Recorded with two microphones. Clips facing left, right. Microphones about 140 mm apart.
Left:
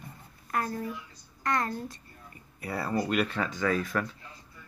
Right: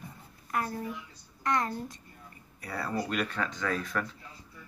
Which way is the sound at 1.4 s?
20° right (ahead or behind).